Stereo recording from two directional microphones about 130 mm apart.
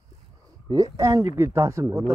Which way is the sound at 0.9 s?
25° right (ahead or behind).